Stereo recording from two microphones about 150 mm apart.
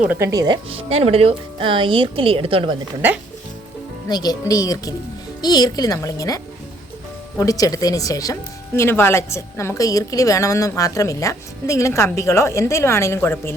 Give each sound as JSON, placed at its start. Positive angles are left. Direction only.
{"t": 0.0, "sound": "speech", "side_deg": -10}
{"t": 0.3, "sound": "speech", "side_deg": -25}
{"t": 4.1, "sound": "a woman's voice", "side_deg": 25}